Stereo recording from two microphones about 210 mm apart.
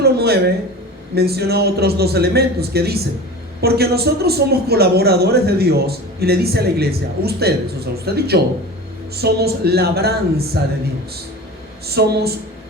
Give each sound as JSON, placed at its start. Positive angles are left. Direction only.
{"t": 0.0, "sound": "a man's voice", "side_deg": -50}
{"t": 11.9, "sound": "a man's voice", "side_deg": -50}